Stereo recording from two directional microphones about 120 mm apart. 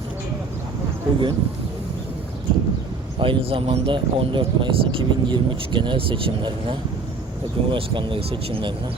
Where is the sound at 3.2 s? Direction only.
50° right (ahead or behind).